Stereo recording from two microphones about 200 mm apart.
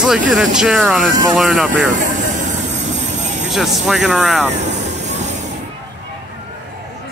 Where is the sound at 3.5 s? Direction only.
Centre (ahead or behind).